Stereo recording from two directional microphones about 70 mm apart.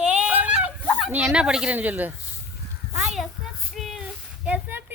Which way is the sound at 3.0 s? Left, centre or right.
Centre.